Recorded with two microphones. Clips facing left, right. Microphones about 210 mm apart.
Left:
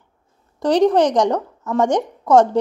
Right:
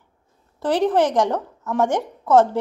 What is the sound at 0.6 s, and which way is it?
A woman's voice, 15° left (ahead or behind).